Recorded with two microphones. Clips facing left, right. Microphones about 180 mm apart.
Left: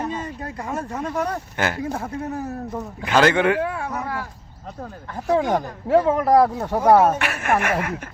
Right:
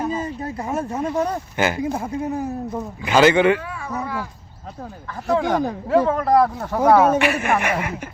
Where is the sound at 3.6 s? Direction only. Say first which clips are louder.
Left 6 dB; 60° left (ahead or behind).